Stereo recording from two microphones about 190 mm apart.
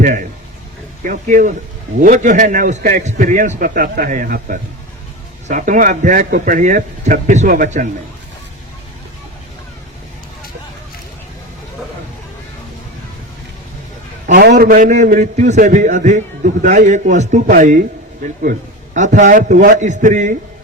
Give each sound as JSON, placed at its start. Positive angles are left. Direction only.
{"t": 0.0, "sound": "a man's voice", "side_deg": -45}
{"t": 14.3, "sound": "a man's voice", "side_deg": -55}